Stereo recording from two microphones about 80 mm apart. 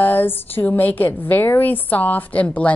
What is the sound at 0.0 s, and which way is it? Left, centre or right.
A woman's voice, left.